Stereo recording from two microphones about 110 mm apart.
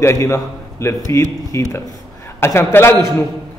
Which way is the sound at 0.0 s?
25° left (ahead or behind).